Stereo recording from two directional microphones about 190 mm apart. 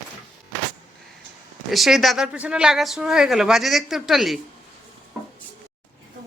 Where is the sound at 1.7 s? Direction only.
Centre (ahead or behind).